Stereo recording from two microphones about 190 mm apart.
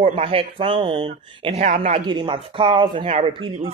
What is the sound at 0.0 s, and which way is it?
Speech, 30° right (ahead or behind).